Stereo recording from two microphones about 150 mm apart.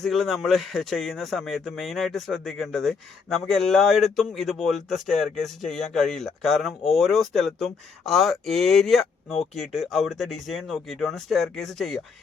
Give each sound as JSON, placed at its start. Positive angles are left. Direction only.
{"t": 0.0, "sound": "speech", "side_deg": 0}